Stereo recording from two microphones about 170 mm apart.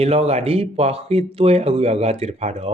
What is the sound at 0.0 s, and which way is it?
Speech, 35° right (ahead or behind).